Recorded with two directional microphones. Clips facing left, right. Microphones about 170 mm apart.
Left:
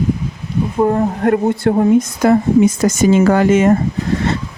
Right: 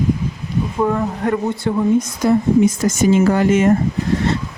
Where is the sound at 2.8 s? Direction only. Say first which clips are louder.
Left 2 dB; 90° left.